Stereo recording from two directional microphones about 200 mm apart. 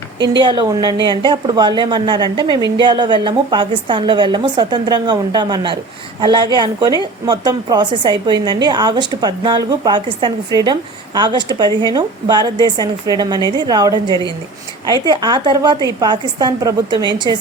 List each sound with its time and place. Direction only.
0.2 s a woman's voice: 20° right (ahead or behind)
15.0 s a woman's voice: 20° right (ahead or behind)